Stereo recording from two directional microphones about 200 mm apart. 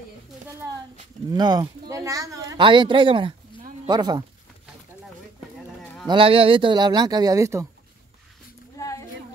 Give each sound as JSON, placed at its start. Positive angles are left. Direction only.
{"t": 1.3, "sound": "speech", "side_deg": -20}
{"t": 6.0, "sound": "speech", "side_deg": -25}
{"t": 8.7, "sound": "a sound", "side_deg": 15}